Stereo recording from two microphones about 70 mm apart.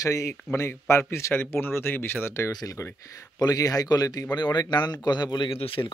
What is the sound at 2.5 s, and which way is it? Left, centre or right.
Speech, left.